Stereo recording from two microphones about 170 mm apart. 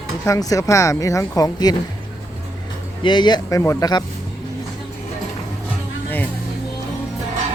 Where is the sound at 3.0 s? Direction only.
25° left (ahead or behind).